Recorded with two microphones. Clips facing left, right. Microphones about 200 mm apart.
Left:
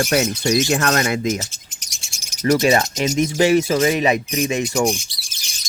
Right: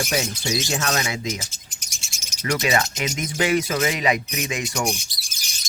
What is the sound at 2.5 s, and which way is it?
Speech, 40° left (ahead or behind).